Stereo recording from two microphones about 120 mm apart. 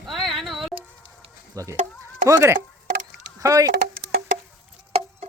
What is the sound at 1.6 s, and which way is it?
Speech, 25° right (ahead or behind).